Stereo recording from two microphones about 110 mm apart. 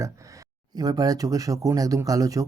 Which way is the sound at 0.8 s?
35° right (ahead or behind).